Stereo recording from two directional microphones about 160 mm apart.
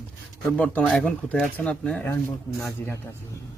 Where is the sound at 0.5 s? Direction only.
5° left (ahead or behind).